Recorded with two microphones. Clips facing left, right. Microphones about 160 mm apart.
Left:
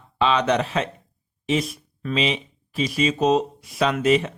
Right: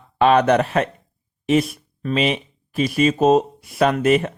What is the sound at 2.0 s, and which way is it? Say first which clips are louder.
Speech: right 3 dB; 45° right (ahead or behind).